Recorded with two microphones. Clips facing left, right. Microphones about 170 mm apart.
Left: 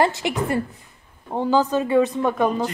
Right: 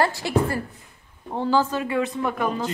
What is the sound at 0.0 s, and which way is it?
Speech, 20° left (ahead or behind).